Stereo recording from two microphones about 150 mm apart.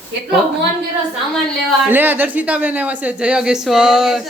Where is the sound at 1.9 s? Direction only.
10° right (ahead or behind).